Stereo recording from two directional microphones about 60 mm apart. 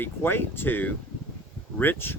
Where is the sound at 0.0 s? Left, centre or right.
Left.